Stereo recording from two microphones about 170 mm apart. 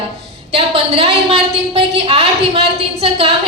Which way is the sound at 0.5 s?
35° right (ahead or behind).